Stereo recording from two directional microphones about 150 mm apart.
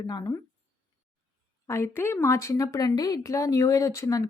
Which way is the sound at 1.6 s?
20° left (ahead or behind).